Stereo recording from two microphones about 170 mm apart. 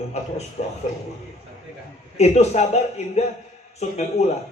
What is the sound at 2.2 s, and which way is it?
Speech, 40° left (ahead or behind).